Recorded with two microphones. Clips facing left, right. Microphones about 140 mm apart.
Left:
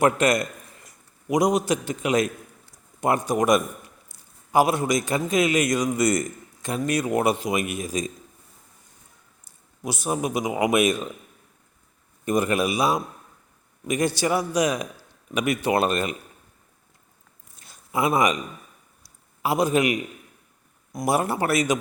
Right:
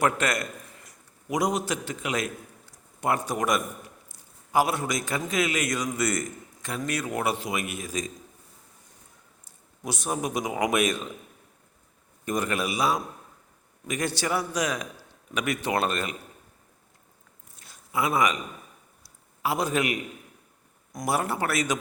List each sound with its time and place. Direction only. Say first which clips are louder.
0.0 s a man's voice: left 5 dB; 15° left (ahead or behind)
4.1 s a sound: left 4 dB; 15° left (ahead or behind)
5.0 s a man's voice: left 5 dB; 20° left (ahead or behind)
9.4 s a man's voice: left 4 dB; 5° left (ahead or behind)
12.2 s a man's voice: left 6 dB; 10° left (ahead or behind)
17.7 s a sound: left 4 dB; 20° left (ahead or behind)
20.9 s a man's voice: left 4 dB; 5° left (ahead or behind)